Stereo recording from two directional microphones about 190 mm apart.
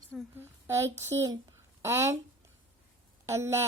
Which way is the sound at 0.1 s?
5° left (ahead or behind).